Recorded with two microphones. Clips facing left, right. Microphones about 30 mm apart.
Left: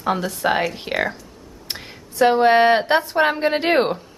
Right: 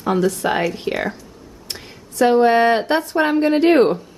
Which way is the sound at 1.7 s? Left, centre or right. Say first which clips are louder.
Right 1 dB; centre.